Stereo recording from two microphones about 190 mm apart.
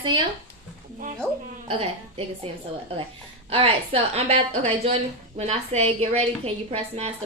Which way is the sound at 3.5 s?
30° right (ahead or behind).